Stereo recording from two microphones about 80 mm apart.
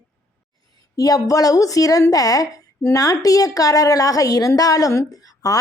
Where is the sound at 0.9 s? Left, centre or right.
Left.